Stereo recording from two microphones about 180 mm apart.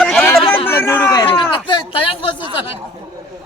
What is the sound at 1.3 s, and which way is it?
Speech, 25° left (ahead or behind).